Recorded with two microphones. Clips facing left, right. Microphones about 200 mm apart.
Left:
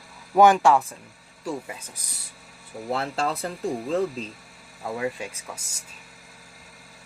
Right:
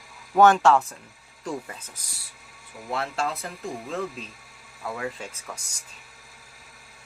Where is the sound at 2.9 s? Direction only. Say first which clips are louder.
Left 2 dB; 30° left (ahead or behind).